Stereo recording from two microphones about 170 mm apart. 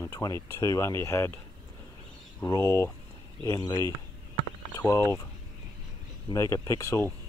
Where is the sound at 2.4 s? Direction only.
15° left (ahead or behind).